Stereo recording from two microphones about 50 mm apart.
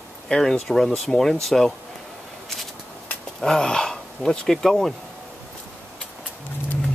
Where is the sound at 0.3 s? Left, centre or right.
Centre.